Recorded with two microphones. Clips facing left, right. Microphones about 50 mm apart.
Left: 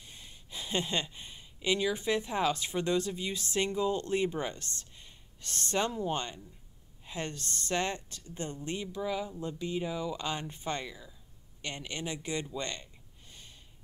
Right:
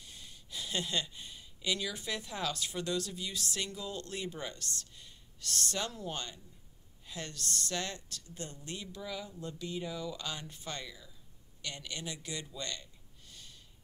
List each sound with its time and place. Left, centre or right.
0.0 s speech: left